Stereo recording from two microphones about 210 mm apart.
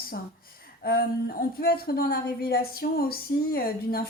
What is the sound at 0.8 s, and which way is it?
A woman's voice, 45° left (ahead or behind).